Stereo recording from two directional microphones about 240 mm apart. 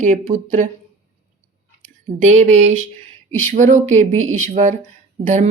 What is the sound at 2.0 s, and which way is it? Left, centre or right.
Speech, right.